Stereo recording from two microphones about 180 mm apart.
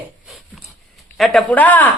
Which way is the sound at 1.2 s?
Centre (ahead or behind).